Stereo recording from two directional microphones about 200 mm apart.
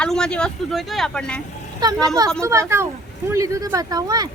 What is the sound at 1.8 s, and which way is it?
Speech, 20° right (ahead or behind).